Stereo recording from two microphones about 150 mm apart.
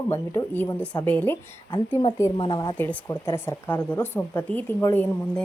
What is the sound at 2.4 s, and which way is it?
Speech, 30° left (ahead or behind).